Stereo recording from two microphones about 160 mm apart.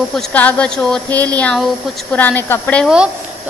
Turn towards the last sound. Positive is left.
turn(degrees=-5)  # may be behind; listen again after turning